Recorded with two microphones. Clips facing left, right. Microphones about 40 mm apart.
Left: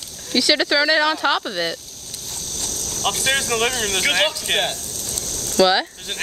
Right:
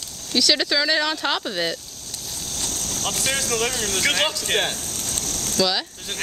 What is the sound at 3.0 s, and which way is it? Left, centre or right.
Speech, left.